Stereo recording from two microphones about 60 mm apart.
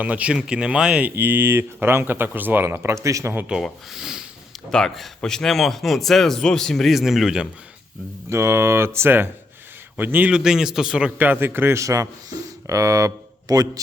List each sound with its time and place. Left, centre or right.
0.0 s speech: right
1.1 s speech: right
3.9 s a sound: centre
4.5 s a man's voice: centre
6.9 s a man's voice: centre
8.3 s speech: right
10.3 s a man's voice: centre
11.2 s speech: right
11.8 s speech: right